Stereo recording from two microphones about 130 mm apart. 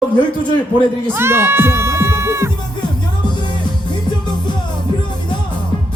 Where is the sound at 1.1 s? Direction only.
20° right (ahead or behind).